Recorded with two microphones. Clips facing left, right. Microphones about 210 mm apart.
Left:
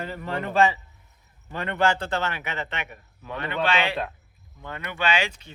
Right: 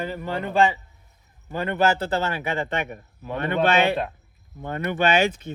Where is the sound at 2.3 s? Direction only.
40° right (ahead or behind).